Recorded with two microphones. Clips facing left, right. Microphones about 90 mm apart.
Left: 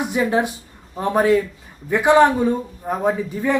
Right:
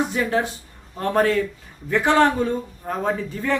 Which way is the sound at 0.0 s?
15° left (ahead or behind).